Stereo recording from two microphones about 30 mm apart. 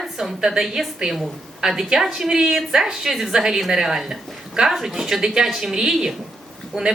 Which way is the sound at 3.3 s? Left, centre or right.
Right.